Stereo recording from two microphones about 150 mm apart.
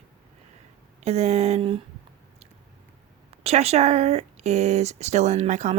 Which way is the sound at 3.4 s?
45° right (ahead or behind).